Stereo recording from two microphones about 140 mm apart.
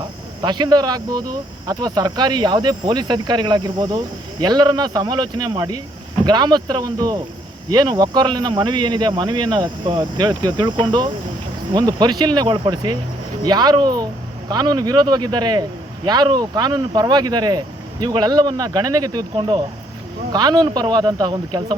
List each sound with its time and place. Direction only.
0.4 s speech: 30° right (ahead or behind)